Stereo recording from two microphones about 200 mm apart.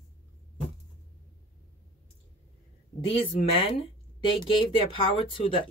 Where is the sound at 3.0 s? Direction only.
30° left (ahead or behind).